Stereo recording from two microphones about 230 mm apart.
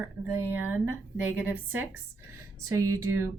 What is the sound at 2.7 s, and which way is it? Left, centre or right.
Speech, centre.